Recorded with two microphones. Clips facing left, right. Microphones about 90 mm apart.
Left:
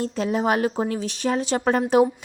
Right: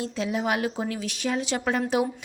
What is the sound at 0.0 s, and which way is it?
A woman's voice, 45° left (ahead or behind).